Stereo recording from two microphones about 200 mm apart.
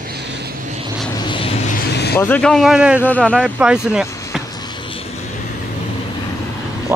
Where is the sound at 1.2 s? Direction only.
25° left (ahead or behind).